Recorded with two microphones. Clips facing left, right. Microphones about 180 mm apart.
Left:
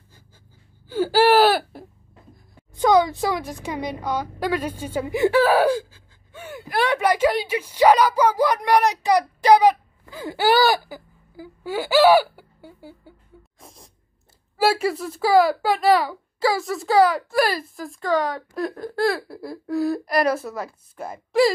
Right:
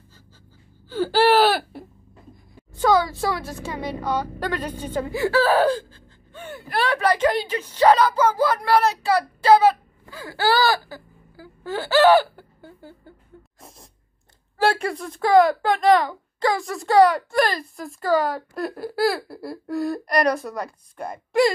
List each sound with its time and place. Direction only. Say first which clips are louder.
0.8 s whimper: left 1 dB; 10° left (ahead or behind)
2.7 s a woman's voice: left 2 dB; 15° left (ahead or behind)
13.6 s sneeze: left 2 dB; centre (ahead or behind)
14.6 s speech: left 1 dB; 5° left (ahead or behind)